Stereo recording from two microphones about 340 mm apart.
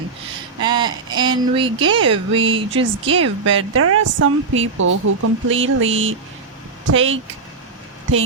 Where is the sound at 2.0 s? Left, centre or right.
Right.